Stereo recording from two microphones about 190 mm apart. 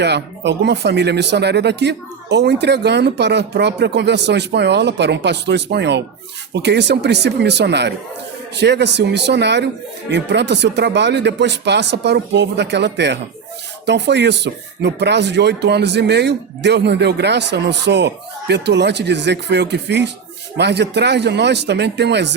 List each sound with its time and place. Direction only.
0.0 s speech: 65° right (ahead or behind)